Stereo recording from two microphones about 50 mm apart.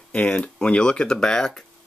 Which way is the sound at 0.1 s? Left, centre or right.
Left.